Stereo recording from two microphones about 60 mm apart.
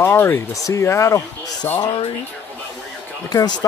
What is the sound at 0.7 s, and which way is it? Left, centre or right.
Speech, left.